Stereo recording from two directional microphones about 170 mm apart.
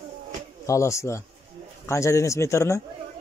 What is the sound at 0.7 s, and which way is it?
A man's voice, 15° left (ahead or behind).